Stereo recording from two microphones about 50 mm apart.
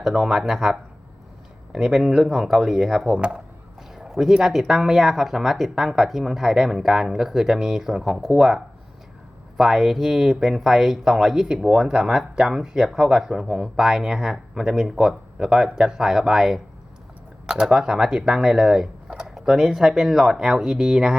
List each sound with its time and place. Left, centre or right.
0.0 s speech: centre
3.2 s speech: right
3.9 s speech: centre